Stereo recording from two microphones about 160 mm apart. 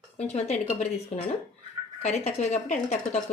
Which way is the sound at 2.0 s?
45° left (ahead or behind).